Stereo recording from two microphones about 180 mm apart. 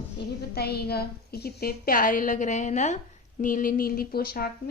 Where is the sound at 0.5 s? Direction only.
60° left (ahead or behind).